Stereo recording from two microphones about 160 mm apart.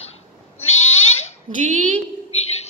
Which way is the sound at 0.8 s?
40° left (ahead or behind).